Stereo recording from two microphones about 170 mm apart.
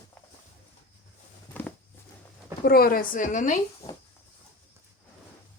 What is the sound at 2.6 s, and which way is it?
Speech, 60° left (ahead or behind).